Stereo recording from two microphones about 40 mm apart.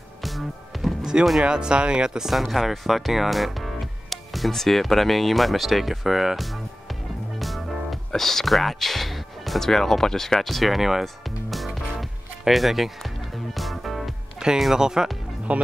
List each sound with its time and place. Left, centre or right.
0.2 s music: centre
1.4 s speech: right
2.3 s speech: centre
4.5 s a sound: centre
8.1 s music: centre
14.4 s music: centre
14.8 s speech: centre
15.5 s speech: right